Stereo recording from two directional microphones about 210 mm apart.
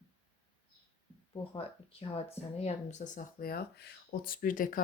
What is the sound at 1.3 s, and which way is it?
Speech, 25° left (ahead or behind).